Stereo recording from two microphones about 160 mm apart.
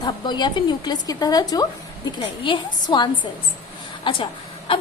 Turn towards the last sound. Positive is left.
turn(degrees=35)  # may be behind; listen again after turning